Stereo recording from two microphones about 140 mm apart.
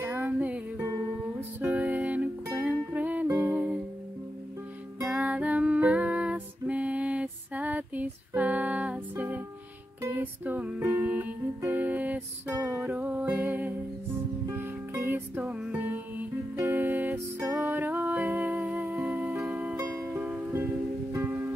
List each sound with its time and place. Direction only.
0.0 s music: 15° right (ahead or behind)
5.1 s music: 10° right (ahead or behind)